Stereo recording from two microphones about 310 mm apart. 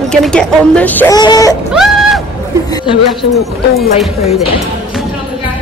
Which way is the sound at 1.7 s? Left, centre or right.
Centre.